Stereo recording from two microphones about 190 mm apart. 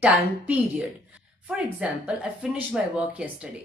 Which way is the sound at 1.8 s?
5° right (ahead or behind).